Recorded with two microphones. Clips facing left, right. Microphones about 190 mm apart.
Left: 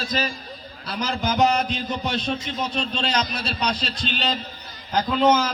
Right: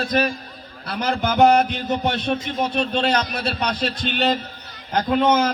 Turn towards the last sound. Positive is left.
turn(degrees=-55)  # may be behind; listen again after turning